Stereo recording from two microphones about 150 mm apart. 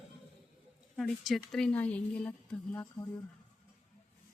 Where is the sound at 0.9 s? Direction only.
5° left (ahead or behind).